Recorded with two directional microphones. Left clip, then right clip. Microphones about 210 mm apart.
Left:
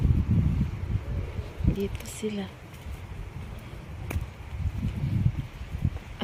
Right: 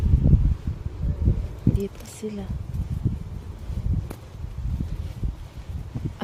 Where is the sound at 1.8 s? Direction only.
5° right (ahead or behind).